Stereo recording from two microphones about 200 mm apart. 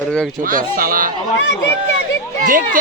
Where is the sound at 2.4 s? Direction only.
45° right (ahead or behind).